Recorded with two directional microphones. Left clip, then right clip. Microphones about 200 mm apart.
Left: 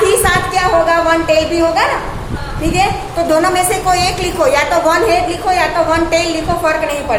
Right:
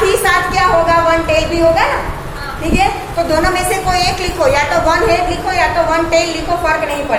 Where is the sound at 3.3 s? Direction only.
30° left (ahead or behind).